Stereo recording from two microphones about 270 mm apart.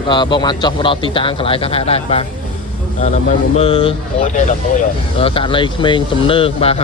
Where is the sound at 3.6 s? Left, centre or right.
Centre.